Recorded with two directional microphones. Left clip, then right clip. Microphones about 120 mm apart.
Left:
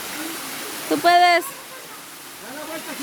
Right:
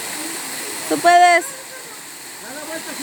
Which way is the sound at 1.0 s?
15° left (ahead or behind).